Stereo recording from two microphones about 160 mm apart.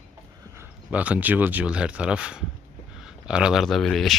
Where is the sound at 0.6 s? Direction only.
10° right (ahead or behind).